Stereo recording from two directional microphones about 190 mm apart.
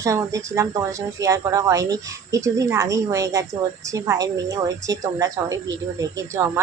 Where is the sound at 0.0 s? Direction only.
15° right (ahead or behind).